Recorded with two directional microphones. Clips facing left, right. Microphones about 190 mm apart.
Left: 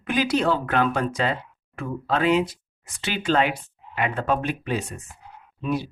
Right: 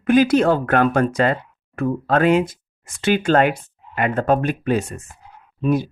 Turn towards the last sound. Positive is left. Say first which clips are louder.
# right 7 dB
turn(degrees=-45)  # may be behind; listen again after turning